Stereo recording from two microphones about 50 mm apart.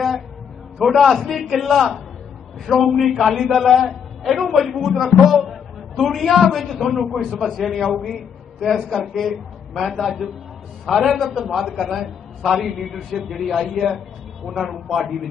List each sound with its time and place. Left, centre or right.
0.7 s a man's voice: centre